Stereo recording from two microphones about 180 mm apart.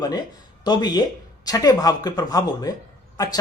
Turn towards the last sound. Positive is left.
turn(degrees=20)  # may be behind; listen again after turning